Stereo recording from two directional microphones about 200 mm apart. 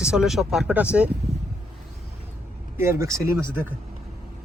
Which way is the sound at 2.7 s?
15° right (ahead or behind).